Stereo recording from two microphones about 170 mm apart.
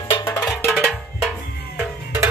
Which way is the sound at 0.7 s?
Centre (ahead or behind).